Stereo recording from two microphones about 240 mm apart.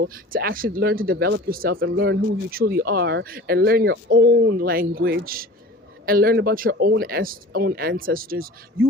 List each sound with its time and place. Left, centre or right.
0.0 s speech: right